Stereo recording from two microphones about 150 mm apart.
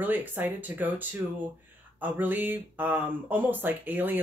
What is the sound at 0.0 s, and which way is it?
Speech, 10° right (ahead or behind).